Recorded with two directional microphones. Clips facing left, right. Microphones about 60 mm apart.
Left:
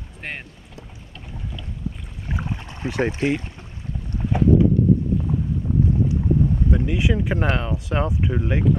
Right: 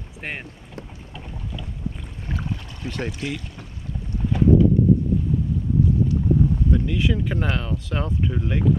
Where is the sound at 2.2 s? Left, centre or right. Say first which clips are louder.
Left 1 dB; left.